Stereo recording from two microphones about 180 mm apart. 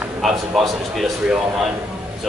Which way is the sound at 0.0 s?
Centre (ahead or behind).